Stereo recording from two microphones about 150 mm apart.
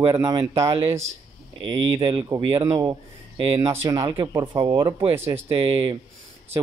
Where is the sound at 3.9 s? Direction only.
35° right (ahead or behind).